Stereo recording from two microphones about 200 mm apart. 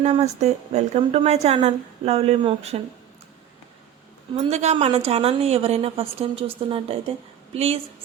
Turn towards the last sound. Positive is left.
turn(degrees=-30)  # may be behind; listen again after turning